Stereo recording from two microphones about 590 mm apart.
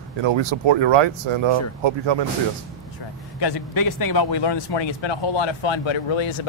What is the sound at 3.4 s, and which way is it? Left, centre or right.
Speech, left.